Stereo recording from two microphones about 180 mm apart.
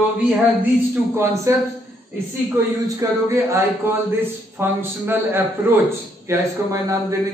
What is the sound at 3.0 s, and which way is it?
A man's voice, 15° right (ahead or behind).